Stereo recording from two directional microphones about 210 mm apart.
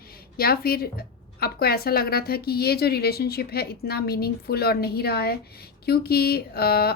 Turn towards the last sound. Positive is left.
turn(degrees=45)  # may be behind; listen again after turning